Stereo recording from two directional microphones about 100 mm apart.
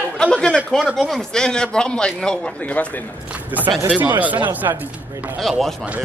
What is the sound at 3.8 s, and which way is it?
Speech, 20° right (ahead or behind).